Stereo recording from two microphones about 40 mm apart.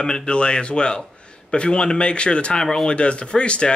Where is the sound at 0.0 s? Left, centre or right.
Left.